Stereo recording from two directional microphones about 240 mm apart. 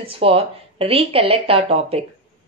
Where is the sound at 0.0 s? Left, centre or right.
Right.